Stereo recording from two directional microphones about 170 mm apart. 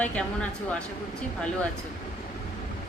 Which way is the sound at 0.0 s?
5° left (ahead or behind).